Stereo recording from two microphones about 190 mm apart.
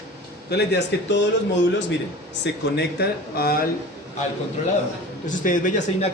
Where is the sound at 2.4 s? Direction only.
60° left (ahead or behind).